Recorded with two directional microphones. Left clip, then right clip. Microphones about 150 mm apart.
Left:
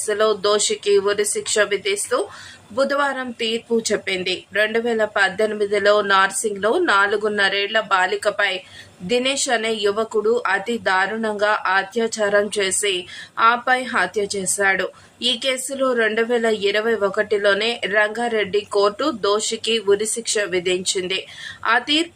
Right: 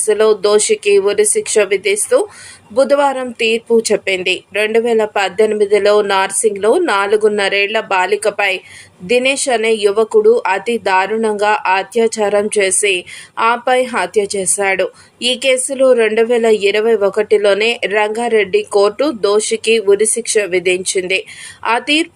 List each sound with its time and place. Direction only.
0.0 s speech: 20° right (ahead or behind)
4.5 s speech: 20° right (ahead or behind)